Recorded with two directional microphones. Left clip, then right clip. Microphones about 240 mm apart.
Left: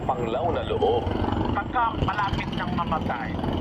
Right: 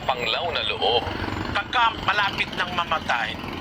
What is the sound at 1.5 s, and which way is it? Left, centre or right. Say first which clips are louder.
Speech: right 6 dB; right.